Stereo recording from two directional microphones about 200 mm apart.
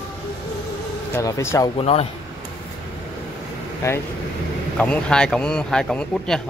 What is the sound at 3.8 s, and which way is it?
A man's voice, 15° left (ahead or behind).